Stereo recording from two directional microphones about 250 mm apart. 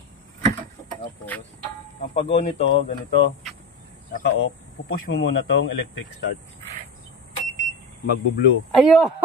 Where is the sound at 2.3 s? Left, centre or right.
Left.